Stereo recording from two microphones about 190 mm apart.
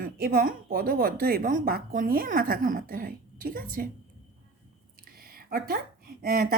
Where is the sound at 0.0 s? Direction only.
50° right (ahead or behind).